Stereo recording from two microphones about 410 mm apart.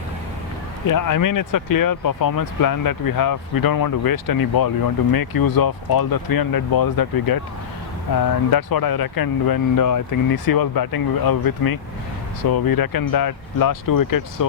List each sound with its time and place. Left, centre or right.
0.9 s speech: left